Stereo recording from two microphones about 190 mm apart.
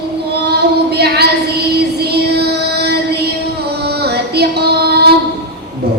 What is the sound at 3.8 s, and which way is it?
Music, 60° right (ahead or behind).